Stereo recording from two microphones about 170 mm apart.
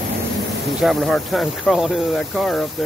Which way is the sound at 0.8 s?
Centre (ahead or behind).